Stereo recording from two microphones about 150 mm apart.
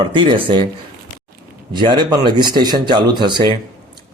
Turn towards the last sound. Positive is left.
turn(degrees=-30)  # may be behind; listen again after turning